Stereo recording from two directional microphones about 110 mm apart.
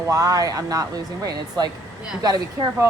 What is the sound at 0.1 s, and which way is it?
Speech, 30° right (ahead or behind).